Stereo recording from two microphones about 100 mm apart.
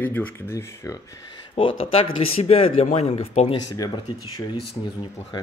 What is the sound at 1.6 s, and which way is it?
Speech, 65° left (ahead or behind).